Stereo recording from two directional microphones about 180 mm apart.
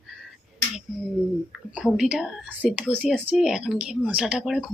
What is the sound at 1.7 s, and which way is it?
Speech, 5° right (ahead or behind).